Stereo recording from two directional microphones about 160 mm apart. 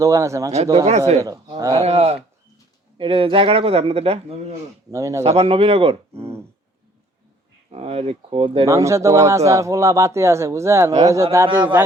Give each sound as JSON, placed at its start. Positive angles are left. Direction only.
{"t": 0.0, "sound": "speech", "side_deg": -20}
{"t": 0.5, "sound": "speech", "side_deg": -40}
{"t": 4.9, "sound": "speech", "side_deg": -20}
{"t": 5.2, "sound": "speech", "side_deg": -40}
{"t": 6.1, "sound": "speech", "side_deg": -15}
{"t": 7.7, "sound": "speech", "side_deg": -40}
{"t": 8.6, "sound": "speech", "side_deg": -20}